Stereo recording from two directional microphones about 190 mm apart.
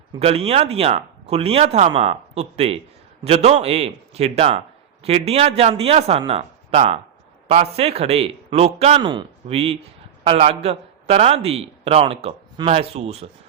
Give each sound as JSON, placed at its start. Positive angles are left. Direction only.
{"t": 0.2, "sound": "a man's voice", "side_deg": -30}